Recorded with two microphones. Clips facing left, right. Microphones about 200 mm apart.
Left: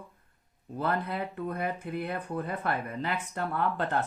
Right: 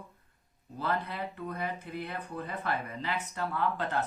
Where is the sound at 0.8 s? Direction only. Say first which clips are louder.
Left 3 dB; 55° left (ahead or behind).